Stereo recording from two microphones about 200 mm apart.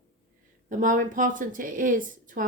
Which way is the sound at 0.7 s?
40° right (ahead or behind).